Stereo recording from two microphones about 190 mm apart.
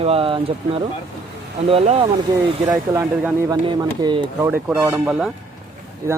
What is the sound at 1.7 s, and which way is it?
Speech, 30° right (ahead or behind).